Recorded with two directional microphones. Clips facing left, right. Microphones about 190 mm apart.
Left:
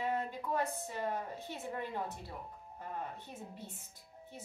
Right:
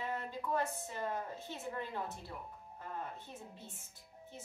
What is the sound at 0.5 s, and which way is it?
A woman's voice, 15° left (ahead or behind).